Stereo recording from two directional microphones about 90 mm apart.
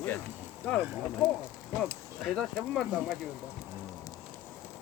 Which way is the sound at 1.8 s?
5° left (ahead or behind).